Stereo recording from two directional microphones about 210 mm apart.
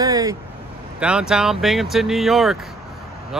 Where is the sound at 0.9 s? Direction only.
5° right (ahead or behind).